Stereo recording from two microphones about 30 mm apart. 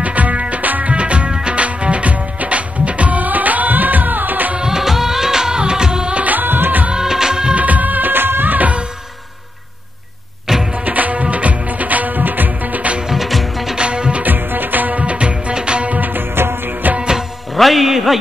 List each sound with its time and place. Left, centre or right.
0.0 s music: right
0.9 s music: right
4.6 s music of bollywood: centre
6.3 s music: right
6.9 s music of bollywood: right
7.5 s music of bollywood: right
10.9 s music: right
13.1 s music: centre
13.7 s music: right
14.2 s music: right
15.0 s music: right
15.9 s music: right
17.6 s music: centre
17.8 s a sound: centre